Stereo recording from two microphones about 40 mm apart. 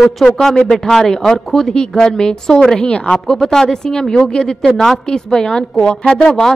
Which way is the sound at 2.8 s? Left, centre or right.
Left.